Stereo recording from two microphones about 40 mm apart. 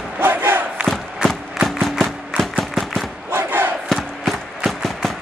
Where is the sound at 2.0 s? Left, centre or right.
Centre.